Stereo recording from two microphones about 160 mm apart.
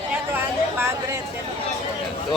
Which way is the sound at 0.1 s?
15° right (ahead or behind).